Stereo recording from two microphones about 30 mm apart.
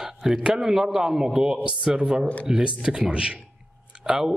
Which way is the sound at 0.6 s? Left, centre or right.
Centre.